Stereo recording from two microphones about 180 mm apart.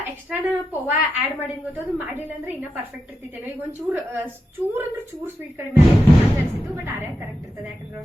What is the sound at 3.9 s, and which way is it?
Speech, 10° right (ahead or behind).